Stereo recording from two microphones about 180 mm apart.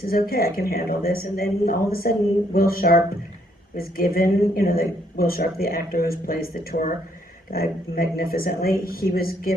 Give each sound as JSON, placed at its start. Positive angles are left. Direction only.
{"t": 0.0, "sound": "speech", "side_deg": 55}